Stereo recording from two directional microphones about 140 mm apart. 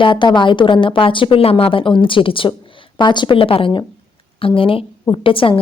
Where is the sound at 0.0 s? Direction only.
35° left (ahead or behind).